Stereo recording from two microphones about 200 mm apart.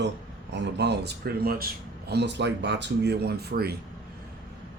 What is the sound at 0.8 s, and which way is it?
Speech, 55° right (ahead or behind).